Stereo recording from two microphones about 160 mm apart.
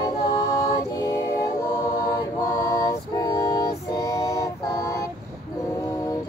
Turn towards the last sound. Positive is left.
turn(degrees=20)  # may be behind; listen again after turning